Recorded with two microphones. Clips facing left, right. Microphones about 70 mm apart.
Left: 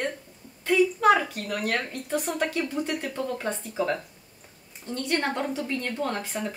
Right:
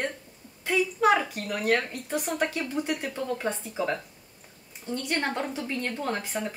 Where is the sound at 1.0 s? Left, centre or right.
Centre.